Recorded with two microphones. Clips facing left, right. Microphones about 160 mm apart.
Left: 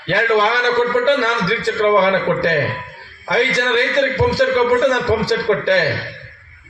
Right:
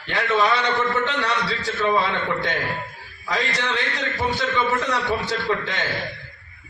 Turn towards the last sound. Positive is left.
turn(degrees=70)  # may be behind; listen again after turning